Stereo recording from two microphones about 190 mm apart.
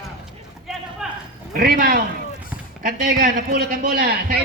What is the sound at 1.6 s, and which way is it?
A man's voice, 50° right (ahead or behind).